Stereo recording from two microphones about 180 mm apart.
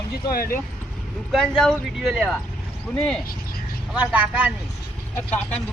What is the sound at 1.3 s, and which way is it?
Speech, centre (ahead or behind).